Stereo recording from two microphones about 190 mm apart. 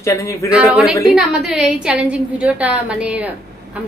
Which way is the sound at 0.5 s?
5° right (ahead or behind).